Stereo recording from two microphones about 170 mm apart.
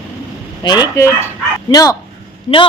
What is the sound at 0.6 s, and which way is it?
Speech, 25° left (ahead or behind).